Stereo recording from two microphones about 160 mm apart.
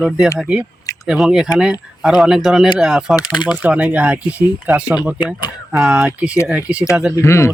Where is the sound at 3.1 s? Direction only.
25° left (ahead or behind).